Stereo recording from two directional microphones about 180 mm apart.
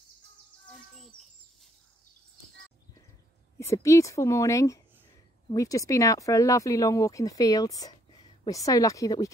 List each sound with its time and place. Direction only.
0.7 s bird: centre (ahead or behind)
3.5 s speech: 15° left (ahead or behind)